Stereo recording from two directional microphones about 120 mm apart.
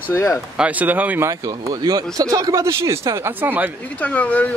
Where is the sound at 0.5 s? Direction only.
10° right (ahead or behind).